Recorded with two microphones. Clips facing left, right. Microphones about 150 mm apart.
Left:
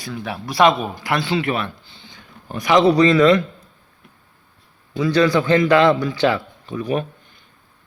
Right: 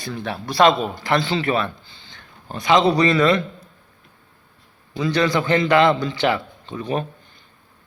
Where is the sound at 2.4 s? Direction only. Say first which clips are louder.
Left 1 dB; 25° right (ahead or behind).